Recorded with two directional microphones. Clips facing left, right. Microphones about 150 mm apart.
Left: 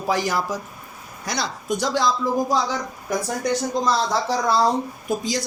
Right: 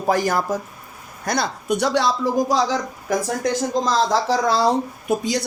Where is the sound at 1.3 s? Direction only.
60° right (ahead or behind).